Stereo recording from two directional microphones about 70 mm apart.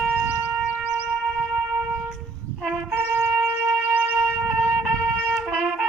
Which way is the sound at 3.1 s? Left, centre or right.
Right.